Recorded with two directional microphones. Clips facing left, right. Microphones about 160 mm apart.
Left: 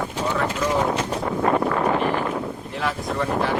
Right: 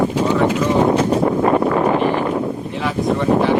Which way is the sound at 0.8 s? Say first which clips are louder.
Right 9 dB; 25° right (ahead or behind).